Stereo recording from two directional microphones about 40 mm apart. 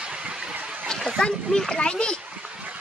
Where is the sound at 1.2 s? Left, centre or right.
Left.